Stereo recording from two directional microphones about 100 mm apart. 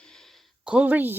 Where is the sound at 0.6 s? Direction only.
15° right (ahead or behind).